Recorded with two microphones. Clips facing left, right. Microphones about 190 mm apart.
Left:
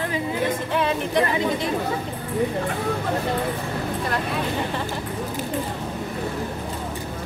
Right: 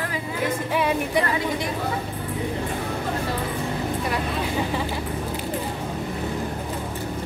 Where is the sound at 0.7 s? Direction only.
10° right (ahead or behind).